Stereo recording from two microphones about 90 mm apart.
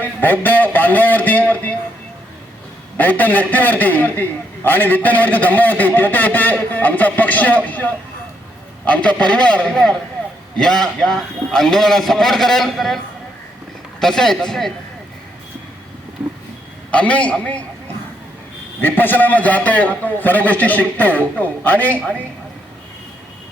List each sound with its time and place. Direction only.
0.0 s a man's voice: 20° left (ahead or behind)
3.0 s a man's voice: 20° left (ahead or behind); by 13.0 s centre (ahead or behind)
14.0 s a man's voice: 5° left (ahead or behind)
16.9 s a man's voice: 15° left (ahead or behind)
18.8 s a man's voice: 20° left (ahead or behind)